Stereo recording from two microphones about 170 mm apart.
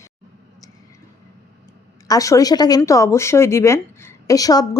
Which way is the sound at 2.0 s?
20° left (ahead or behind).